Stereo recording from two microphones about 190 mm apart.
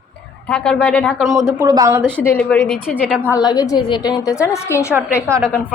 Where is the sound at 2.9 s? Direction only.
5° right (ahead or behind).